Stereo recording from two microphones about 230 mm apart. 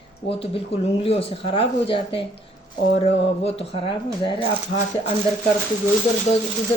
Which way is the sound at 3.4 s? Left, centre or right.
Left.